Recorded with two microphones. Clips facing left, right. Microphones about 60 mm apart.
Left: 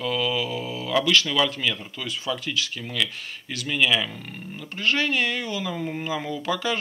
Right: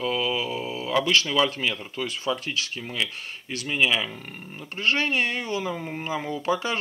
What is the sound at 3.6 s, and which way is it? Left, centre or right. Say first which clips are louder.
Speech: left 1 dB; right.